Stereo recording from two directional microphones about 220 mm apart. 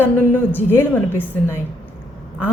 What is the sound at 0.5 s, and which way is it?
Speech, 10° left (ahead or behind).